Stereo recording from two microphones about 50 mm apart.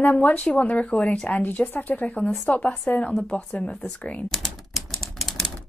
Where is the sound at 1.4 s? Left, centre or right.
Left.